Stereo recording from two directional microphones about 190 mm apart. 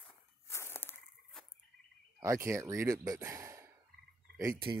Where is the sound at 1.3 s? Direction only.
Centre (ahead or behind).